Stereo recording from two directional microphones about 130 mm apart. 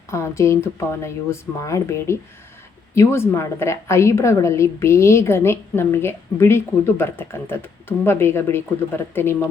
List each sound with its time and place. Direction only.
0.1 s a woman's voice: 20° left (ahead or behind)